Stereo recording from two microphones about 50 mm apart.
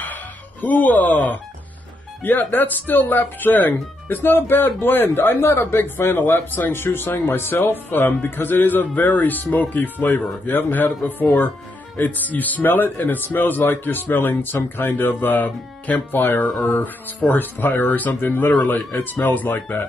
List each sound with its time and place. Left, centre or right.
0.0 s a sound: left
2.2 s speech: left
16.5 s speech: centre
16.8 s speech: left